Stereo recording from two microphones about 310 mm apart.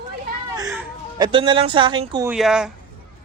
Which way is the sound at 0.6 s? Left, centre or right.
Centre.